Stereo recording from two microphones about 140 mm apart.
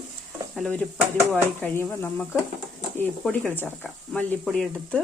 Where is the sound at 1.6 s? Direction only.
15° left (ahead or behind).